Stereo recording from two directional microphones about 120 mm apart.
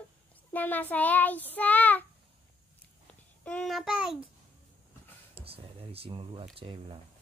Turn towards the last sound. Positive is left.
turn(degrees=-45)  # may be behind; listen again after turning